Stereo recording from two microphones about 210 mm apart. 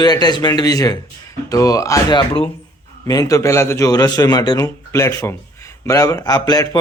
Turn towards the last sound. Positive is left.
turn(degrees=20)  # may be behind; listen again after turning